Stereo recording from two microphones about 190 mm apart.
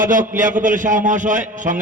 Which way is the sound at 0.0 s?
45° right (ahead or behind).